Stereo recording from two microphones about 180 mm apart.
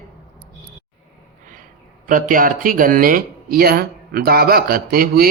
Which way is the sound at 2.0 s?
50° right (ahead or behind).